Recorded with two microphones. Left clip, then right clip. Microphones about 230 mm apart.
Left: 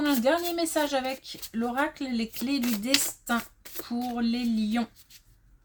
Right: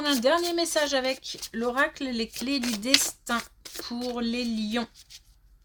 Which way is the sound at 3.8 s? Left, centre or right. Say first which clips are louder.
Even; right.